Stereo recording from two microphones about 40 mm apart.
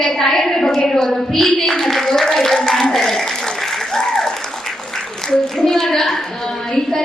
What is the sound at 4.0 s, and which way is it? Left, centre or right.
Applause, centre.